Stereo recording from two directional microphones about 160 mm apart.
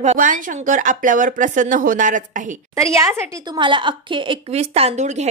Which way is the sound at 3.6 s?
30° right (ahead or behind).